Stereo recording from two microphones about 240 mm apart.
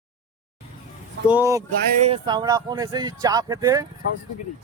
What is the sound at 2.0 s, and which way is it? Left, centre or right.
Speech, right.